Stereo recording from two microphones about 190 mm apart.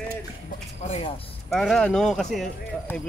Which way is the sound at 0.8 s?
30° left (ahead or behind).